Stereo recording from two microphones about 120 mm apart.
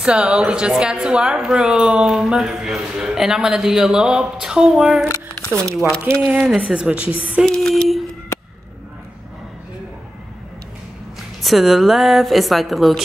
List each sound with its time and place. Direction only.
0.0 s a woman's voice: 10° right (ahead or behind)
5.0 s speech: 25° left (ahead or behind)
6.2 s a woman's voice: 5° right (ahead or behind)
7.4 s a woman's voice: 5° left (ahead or behind)
11.4 s a woman's voice: centre (ahead or behind)